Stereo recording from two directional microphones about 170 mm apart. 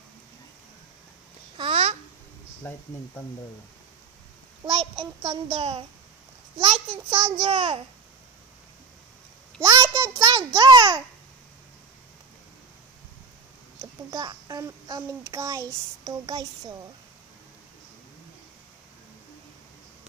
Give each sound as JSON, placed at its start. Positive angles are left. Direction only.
{"t": 1.6, "sound": "babbling", "side_deg": -35}
{"t": 2.6, "sound": "speech", "side_deg": 10}
{"t": 4.6, "sound": "a child's voice", "side_deg": -35}
{"t": 9.6, "sound": "babbling", "side_deg": -20}
{"t": 13.7, "sound": "a child's voice", "side_deg": -20}